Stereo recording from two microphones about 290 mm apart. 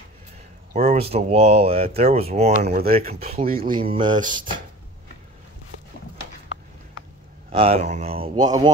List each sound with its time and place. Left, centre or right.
0.7 s speech: right
7.5 s speech: right